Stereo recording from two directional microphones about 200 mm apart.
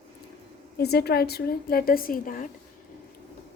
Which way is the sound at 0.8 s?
55° left (ahead or behind).